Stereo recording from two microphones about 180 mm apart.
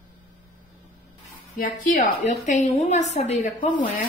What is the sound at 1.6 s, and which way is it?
A woman's voice, 45° left (ahead or behind).